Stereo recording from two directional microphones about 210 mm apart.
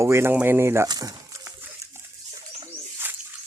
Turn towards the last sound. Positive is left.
turn(degrees=-10)  # may be behind; listen again after turning